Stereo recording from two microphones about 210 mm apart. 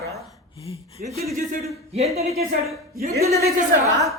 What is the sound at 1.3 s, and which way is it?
Speech, 35° right (ahead or behind).